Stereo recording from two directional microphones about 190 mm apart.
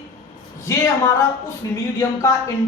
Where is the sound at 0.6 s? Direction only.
15° left (ahead or behind).